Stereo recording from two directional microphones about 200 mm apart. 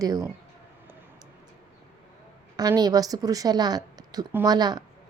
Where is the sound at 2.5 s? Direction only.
20° right (ahead or behind).